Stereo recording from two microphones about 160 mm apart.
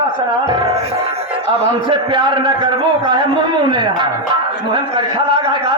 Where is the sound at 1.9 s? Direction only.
30° right (ahead or behind).